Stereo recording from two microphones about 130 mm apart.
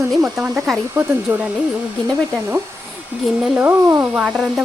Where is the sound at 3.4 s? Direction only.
10° right (ahead or behind).